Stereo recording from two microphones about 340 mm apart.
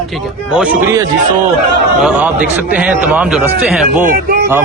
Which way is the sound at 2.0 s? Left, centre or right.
Centre.